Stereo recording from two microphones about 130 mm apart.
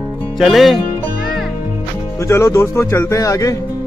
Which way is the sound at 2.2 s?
20° left (ahead or behind).